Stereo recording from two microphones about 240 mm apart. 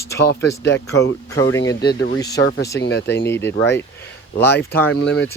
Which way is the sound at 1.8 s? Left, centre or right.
Left.